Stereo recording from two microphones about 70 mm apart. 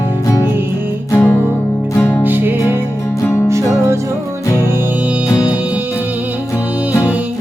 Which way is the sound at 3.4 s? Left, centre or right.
Right.